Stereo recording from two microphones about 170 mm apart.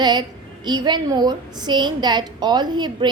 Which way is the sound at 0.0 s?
25° right (ahead or behind).